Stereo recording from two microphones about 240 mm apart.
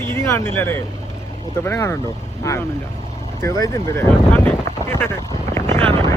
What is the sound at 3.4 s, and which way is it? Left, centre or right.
Speech, centre.